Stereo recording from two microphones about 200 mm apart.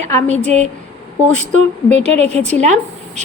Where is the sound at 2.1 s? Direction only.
35° right (ahead or behind).